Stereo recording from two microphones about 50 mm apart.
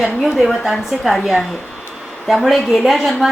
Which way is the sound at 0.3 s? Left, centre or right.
Centre.